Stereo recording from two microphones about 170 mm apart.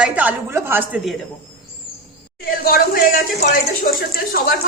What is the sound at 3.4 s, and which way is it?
Speech, 45° left (ahead or behind).